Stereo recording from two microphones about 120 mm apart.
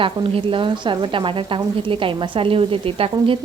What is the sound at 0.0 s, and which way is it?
Speech, 45° right (ahead or behind).